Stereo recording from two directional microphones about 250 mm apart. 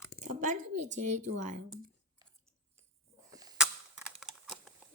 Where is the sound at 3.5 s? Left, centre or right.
Centre.